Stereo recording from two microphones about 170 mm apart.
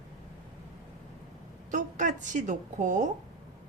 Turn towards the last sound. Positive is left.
turn(degrees=-45)  # may be behind; listen again after turning